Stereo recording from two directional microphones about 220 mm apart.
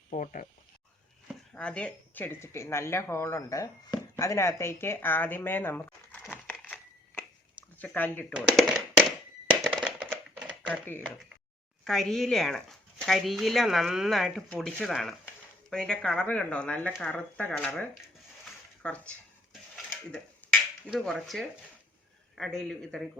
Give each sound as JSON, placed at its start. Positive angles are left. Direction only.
{"t": 0.1, "sound": "speech", "side_deg": 35}
{"t": 1.5, "sound": "speech", "side_deg": 5}
{"t": 7.8, "sound": "speech", "side_deg": 10}
{"t": 8.4, "sound": "tap", "side_deg": 0}
{"t": 9.6, "sound": "a sound", "side_deg": -5}
{"t": 11.9, "sound": "speech", "side_deg": 0}
{"t": 18.4, "sound": "a sound", "side_deg": 5}
{"t": 20.4, "sound": "finger snapping", "side_deg": 5}
{"t": 20.8, "sound": "speech", "side_deg": 0}